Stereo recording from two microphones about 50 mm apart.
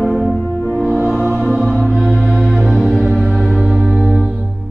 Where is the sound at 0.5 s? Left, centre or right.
Right.